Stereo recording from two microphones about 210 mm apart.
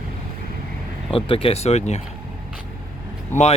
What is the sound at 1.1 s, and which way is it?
Speech, 25° left (ahead or behind).